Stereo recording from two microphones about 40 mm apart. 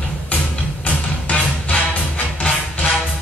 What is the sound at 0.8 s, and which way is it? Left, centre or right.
Music, left.